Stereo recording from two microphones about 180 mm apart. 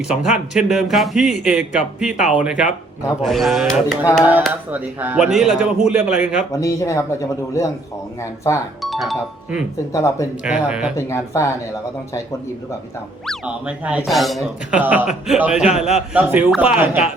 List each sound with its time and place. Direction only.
0.3 s speech: 5° right (ahead or behind)
6.5 s speech: 15° left (ahead or behind)
8.8 s speech: centre (ahead or behind)
9.9 s speech: 15° left (ahead or behind)
10.4 s speech: 5° right (ahead or behind)
10.9 s speech: 15° left (ahead or behind)
13.2 s speech: 5° right (ahead or behind)